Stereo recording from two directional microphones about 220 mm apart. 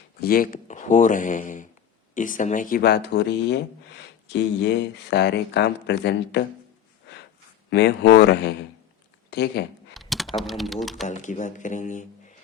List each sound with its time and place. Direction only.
0.2 s speech: 40° left (ahead or behind)
7.7 s speech: 50° left (ahead or behind)
9.9 s speech: centre (ahead or behind)
11.0 s speech: 35° left (ahead or behind)